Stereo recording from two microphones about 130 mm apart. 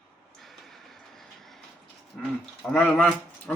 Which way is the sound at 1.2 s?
Centre (ahead or behind).